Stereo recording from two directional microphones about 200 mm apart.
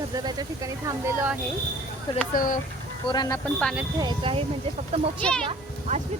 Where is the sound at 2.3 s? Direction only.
45° left (ahead or behind).